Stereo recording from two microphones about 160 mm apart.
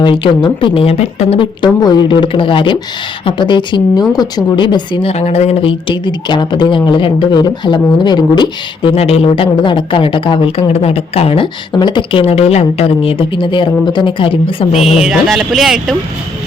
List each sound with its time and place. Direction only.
0.0 s a woman's voice: 30° left (ahead or behind)
14.8 s speech: 5° right (ahead or behind)